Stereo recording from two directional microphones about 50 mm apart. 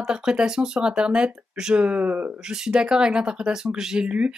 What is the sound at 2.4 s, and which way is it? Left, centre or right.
Speech, centre.